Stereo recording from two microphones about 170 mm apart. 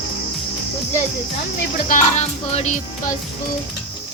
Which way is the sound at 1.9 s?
40° left (ahead or behind).